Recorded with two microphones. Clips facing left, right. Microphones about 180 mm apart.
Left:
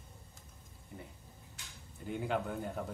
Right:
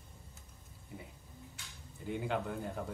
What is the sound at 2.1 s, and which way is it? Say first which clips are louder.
Speech: left 1 dB; centre (ahead or behind).